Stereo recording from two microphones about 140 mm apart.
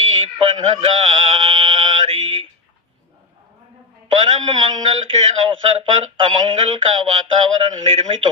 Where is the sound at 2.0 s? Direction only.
45° right (ahead or behind).